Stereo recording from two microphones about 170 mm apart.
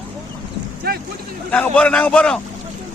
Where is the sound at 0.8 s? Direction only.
65° right (ahead or behind).